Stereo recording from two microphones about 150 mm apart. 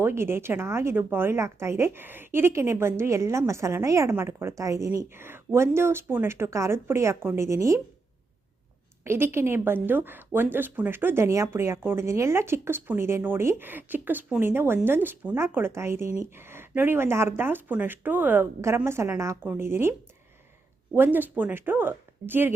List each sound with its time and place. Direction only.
0.0 s speech: 15° right (ahead or behind)
9.0 s speech: 15° right (ahead or behind)